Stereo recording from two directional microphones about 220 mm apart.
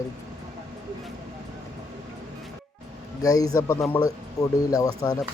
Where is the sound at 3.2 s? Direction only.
15° left (ahead or behind).